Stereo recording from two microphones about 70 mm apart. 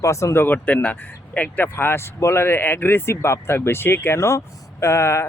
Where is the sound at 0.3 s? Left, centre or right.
Left.